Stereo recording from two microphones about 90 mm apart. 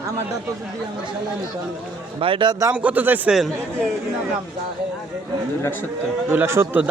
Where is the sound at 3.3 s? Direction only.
Centre (ahead or behind).